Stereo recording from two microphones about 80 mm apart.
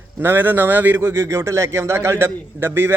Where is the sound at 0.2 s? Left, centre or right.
Right.